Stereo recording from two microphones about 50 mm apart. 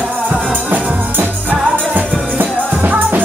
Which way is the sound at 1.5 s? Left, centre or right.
Right.